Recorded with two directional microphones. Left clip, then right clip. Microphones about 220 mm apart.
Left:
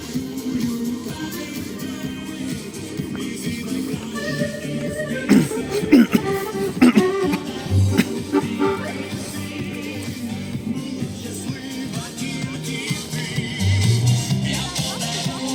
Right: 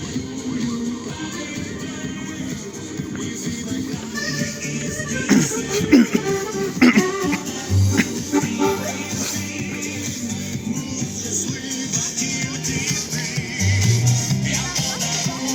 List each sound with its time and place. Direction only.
5.3 s music: 10° left (ahead or behind)
6.2 s music: 55° right (ahead or behind)
6.7 s guitar: 10° left (ahead or behind)
7.0 s a sound: 55° right (ahead or behind)
8.3 s music: 50° right (ahead or behind)
13.6 s music: centre (ahead or behind)